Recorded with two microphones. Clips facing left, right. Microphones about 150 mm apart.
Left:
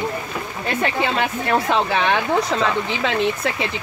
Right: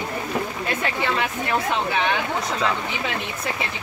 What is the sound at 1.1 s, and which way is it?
Speech, 70° left (ahead or behind).